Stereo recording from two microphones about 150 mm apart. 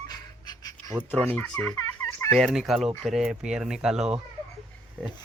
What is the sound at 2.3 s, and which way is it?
Speech, centre (ahead or behind).